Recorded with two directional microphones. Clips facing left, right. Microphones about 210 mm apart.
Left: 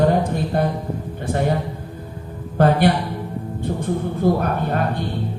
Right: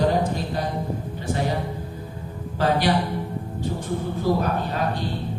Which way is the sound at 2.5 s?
55° left (ahead or behind).